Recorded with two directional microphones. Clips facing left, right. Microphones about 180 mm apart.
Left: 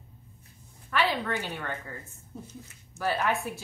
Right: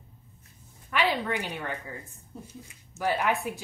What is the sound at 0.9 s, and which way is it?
Speech, 15° right (ahead or behind).